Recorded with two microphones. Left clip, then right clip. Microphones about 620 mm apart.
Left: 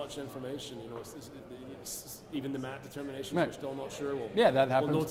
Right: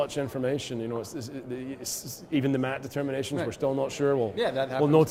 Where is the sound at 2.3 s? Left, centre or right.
Right.